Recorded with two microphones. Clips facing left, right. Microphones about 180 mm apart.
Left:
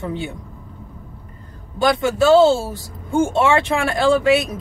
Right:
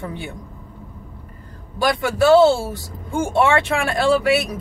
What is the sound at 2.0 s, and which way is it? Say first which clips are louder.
Speech: even; 20° left (ahead or behind).